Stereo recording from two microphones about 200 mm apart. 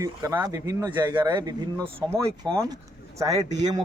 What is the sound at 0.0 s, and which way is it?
A man's voice, 15° right (ahead or behind).